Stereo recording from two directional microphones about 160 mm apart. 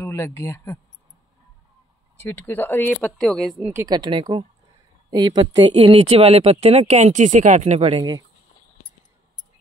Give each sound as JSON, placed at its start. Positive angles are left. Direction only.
{"t": 0.0, "sound": "speech", "side_deg": 15}
{"t": 2.2, "sound": "speech", "side_deg": 15}
{"t": 3.5, "sound": "speech", "side_deg": -15}
{"t": 3.9, "sound": "speech", "side_deg": -30}